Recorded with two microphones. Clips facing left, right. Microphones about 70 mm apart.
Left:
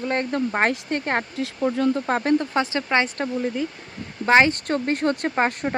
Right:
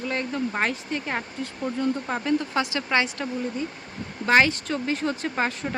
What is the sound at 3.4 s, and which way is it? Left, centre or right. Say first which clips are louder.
Speech: left 4 dB; left.